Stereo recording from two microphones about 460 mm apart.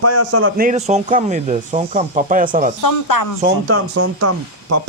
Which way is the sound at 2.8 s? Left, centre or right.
Left.